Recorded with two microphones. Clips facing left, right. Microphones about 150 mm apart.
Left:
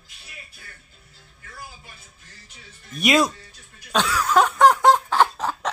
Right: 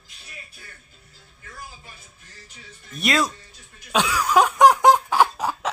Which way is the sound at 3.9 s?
10° right (ahead or behind).